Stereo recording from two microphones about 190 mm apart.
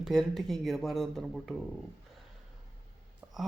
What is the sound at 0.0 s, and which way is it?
Speech, centre (ahead or behind).